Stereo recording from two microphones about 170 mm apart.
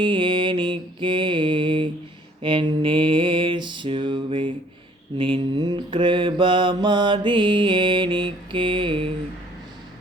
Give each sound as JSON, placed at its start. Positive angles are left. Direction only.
{"t": 0.0, "sound": "mantra", "side_deg": -30}